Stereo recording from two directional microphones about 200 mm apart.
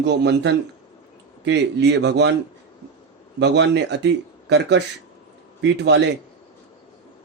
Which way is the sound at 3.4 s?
60° right (ahead or behind).